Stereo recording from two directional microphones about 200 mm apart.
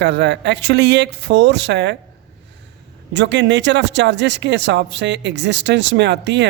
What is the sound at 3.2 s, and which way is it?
Speech, 60° right (ahead or behind).